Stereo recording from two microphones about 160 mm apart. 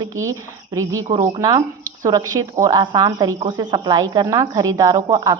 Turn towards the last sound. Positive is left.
turn(degrees=-20)  # may be behind; listen again after turning